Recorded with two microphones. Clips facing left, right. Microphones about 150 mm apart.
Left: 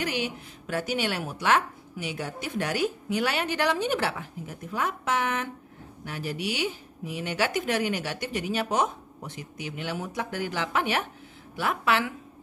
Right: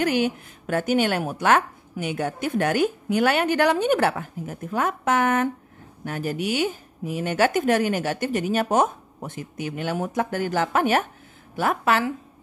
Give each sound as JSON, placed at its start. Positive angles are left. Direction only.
{"t": 0.0, "sound": "speech", "side_deg": -50}